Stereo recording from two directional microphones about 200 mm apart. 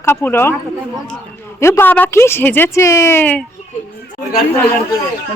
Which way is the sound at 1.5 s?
15° left (ahead or behind).